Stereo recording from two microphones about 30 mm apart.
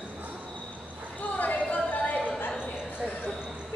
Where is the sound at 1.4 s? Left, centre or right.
Left.